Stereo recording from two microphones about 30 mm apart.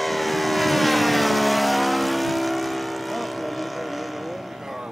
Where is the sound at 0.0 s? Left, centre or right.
Centre.